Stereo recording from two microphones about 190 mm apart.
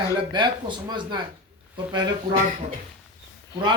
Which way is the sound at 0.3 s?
25° right (ahead or behind).